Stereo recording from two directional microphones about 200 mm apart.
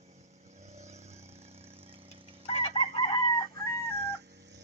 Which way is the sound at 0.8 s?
35° right (ahead or behind).